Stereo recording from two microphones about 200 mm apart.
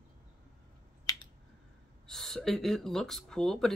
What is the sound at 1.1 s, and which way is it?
Finger snapping, 20° left (ahead or behind).